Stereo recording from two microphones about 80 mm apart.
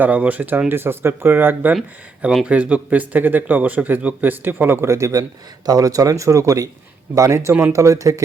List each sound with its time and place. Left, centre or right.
0.0 s speech: centre
2.5 s speech: centre; by 8.2 s right